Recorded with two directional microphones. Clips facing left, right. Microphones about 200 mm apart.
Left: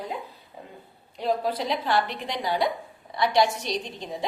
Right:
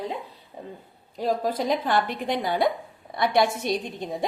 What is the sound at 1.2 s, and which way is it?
A woman's voice, 45° right (ahead or behind).